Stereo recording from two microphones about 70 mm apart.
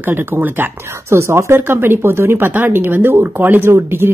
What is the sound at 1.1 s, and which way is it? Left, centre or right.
Speech, right.